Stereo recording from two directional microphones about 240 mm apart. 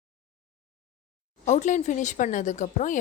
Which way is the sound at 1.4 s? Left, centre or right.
Left.